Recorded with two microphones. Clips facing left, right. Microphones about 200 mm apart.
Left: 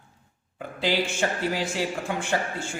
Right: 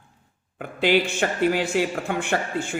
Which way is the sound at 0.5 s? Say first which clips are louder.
Right 5 dB; 60° right (ahead or behind).